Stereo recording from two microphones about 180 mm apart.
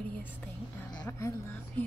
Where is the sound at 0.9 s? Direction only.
20° left (ahead or behind).